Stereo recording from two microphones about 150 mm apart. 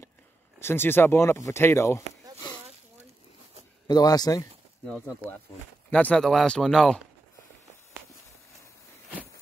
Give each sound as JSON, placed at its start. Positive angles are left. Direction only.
{"t": 0.6, "sound": "speech", "side_deg": 15}
{"t": 3.8, "sound": "speech", "side_deg": 25}
{"t": 4.8, "sound": "speech", "side_deg": 10}